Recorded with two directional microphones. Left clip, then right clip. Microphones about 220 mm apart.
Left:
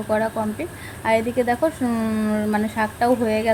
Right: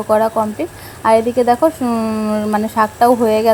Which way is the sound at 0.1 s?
25° right (ahead or behind).